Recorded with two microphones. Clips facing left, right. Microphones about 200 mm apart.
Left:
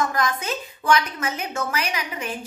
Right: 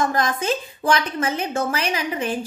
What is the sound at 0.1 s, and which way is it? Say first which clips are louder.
A woman's voice: right 3 dB; 30° right (ahead or behind).